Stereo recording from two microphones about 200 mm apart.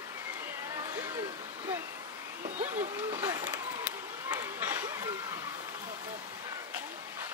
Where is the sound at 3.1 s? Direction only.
15° right (ahead or behind).